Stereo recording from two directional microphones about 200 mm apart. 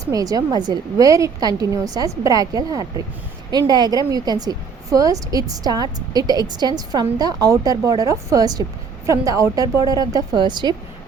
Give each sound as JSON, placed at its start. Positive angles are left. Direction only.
{"t": 0.1, "sound": "a woman's voice", "side_deg": -15}